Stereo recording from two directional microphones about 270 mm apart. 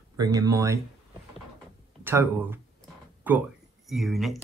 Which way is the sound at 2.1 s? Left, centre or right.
Centre.